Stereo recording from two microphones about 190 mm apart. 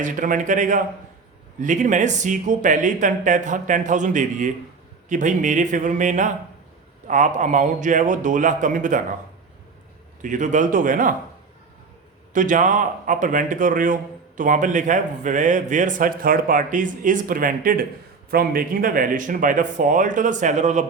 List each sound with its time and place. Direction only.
0.0 s speech: 40° right (ahead or behind)
10.2 s a man's voice: 45° right (ahead or behind)
12.3 s a man's voice: 45° right (ahead or behind)